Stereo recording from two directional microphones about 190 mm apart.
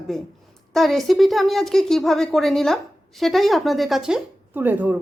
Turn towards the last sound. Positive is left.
turn(degrees=-10)  # may be behind; listen again after turning